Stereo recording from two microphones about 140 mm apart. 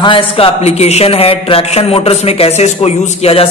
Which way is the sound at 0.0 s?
40° left (ahead or behind).